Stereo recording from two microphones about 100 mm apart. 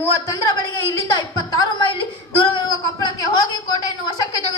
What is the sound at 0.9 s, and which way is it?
Speech, 35° left (ahead or behind).